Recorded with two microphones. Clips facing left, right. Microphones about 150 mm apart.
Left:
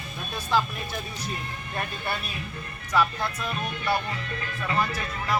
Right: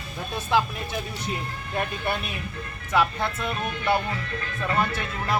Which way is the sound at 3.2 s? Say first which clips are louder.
Right 2 dB; 25° right (ahead or behind).